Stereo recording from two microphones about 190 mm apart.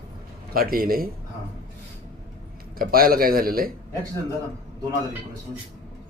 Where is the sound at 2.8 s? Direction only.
50° right (ahead or behind).